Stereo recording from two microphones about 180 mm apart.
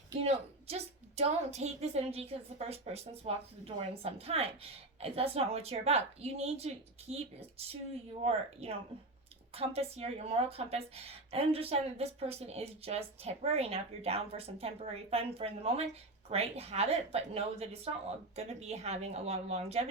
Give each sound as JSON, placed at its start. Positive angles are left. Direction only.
{"t": 0.2, "sound": "a woman's voice", "side_deg": -35}